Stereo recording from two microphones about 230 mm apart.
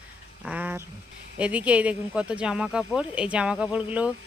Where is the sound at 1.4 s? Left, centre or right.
Centre.